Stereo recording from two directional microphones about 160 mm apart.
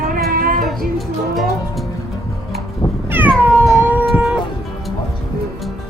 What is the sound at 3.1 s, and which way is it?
Cat, 10° right (ahead or behind).